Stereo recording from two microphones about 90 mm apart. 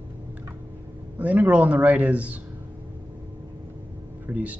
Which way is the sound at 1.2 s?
15° right (ahead or behind).